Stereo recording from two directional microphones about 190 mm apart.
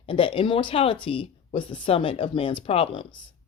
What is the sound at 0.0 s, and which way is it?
Speech, 30° left (ahead or behind).